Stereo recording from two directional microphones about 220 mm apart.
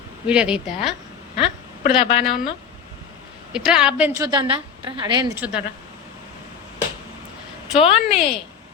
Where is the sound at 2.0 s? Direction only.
25° left (ahead or behind).